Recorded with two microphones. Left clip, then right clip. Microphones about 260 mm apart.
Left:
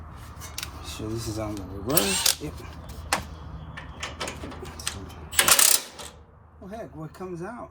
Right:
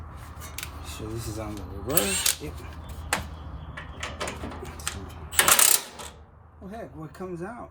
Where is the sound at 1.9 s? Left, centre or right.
Centre.